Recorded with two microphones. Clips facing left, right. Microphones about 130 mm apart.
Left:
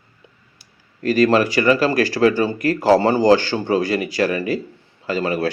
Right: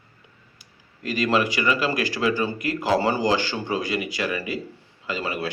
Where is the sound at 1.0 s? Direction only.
40° left (ahead or behind).